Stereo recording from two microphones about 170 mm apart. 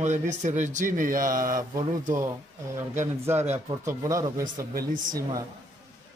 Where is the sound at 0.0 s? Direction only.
45° right (ahead or behind).